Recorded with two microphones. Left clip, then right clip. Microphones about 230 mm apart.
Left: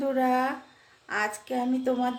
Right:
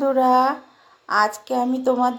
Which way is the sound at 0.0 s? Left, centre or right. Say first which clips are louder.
Right 8 dB; centre.